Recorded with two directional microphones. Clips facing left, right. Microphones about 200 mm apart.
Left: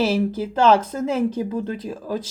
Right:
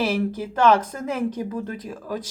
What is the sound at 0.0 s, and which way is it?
Speech, 25° left (ahead or behind).